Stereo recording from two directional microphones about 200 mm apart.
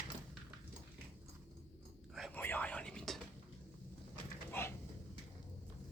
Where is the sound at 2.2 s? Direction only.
10° left (ahead or behind).